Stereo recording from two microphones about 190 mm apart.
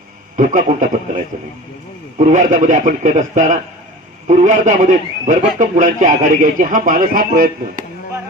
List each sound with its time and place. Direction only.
0.4 s a man's voice: 45° right (ahead or behind)